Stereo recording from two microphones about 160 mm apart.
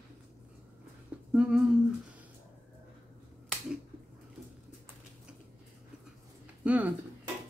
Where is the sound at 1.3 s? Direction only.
5° right (ahead or behind).